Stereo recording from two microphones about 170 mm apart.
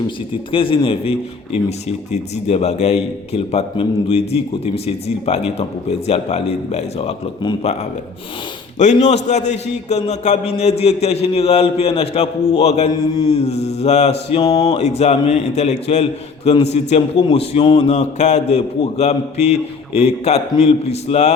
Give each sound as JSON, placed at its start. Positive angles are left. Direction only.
{"t": 0.5, "sound": "a man's voice", "side_deg": 30}
{"t": 2.3, "sound": "a man's voice", "side_deg": 40}
{"t": 8.8, "sound": "a man's voice", "side_deg": 45}
{"t": 14.4, "sound": "music", "side_deg": 20}
{"t": 14.7, "sound": "a man's voice", "side_deg": 40}
{"t": 17.9, "sound": "a man's voice", "side_deg": 45}